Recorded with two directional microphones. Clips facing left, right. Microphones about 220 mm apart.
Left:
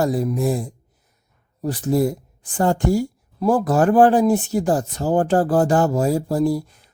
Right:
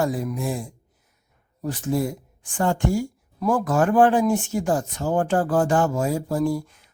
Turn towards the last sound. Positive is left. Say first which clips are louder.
# left 3 dB
turn(degrees=35)  # may be behind; listen again after turning